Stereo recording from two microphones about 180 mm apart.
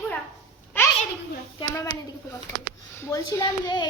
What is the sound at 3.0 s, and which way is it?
Speech, 20° left (ahead or behind).